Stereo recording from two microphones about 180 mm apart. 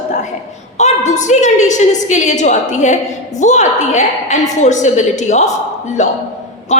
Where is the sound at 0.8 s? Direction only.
40° left (ahead or behind).